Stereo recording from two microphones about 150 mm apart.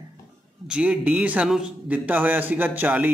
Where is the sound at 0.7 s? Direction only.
10° right (ahead or behind).